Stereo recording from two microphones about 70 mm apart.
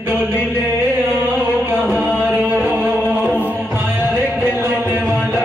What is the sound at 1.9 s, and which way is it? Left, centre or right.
Music, right.